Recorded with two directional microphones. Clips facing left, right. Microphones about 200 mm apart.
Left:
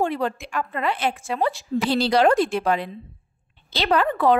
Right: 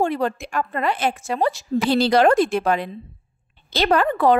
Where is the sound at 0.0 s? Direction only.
45° right (ahead or behind).